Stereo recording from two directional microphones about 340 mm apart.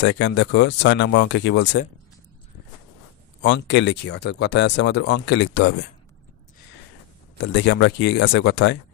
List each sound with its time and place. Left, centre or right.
0.0 s speech: left
3.4 s speech: left
7.3 s speech: left